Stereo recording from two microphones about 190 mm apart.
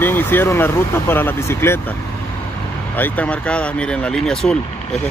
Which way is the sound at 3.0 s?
10° left (ahead or behind).